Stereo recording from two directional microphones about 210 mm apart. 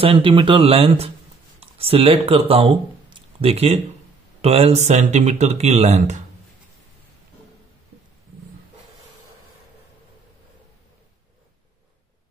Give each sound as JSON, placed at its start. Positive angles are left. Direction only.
{"t": 0.0, "sound": "speech", "side_deg": -25}